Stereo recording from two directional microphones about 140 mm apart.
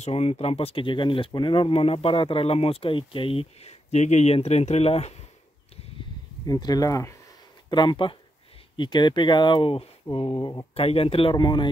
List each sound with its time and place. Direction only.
0.0 s speech: 45° left (ahead or behind)
6.4 s speech: 25° left (ahead or behind)
7.7 s speech: 35° left (ahead or behind)
10.3 s speech: 25° left (ahead or behind)
10.7 s speech: 45° left (ahead or behind)